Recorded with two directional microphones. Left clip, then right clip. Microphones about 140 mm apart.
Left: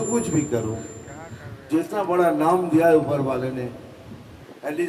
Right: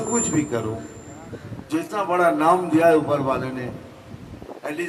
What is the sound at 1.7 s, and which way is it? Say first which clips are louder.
A man's voice: left 1 dB; 25° right (ahead or behind).